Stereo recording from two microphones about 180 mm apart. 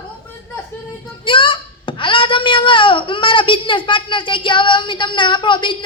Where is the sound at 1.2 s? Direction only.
30° left (ahead or behind).